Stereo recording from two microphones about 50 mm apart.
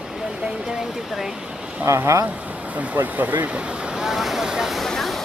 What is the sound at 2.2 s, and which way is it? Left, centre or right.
Speech, right.